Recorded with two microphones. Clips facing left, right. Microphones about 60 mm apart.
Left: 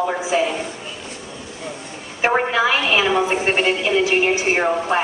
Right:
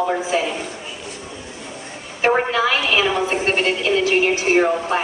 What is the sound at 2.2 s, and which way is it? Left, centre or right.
A woman's voice, centre.